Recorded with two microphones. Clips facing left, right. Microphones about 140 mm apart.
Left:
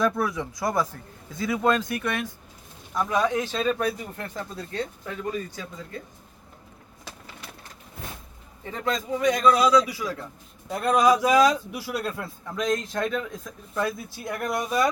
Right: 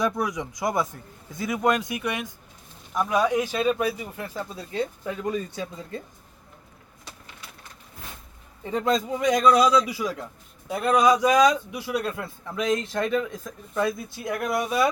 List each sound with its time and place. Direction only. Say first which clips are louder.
0.0 s speech: left 1 dB; 15° right (ahead or behind)
5.5 s a man's voice: right 4 dB; 25° right (ahead or behind)
8.7 s a man's voice: right 4 dB; 20° right (ahead or behind)
10.7 s a man's voice: even; centre (ahead or behind)